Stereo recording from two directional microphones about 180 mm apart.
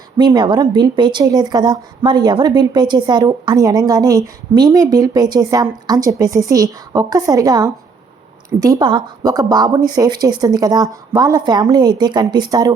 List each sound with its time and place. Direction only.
0.2 s a woman's voice: 25° right (ahead or behind)